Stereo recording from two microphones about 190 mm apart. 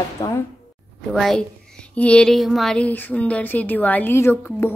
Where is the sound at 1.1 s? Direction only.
Centre (ahead or behind).